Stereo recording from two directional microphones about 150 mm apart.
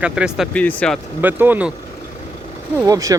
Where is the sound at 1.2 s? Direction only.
15° right (ahead or behind).